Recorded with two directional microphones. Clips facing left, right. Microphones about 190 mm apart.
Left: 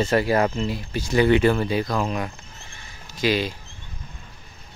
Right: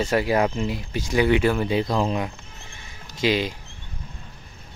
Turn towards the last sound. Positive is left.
turn(degrees=-20)  # may be behind; listen again after turning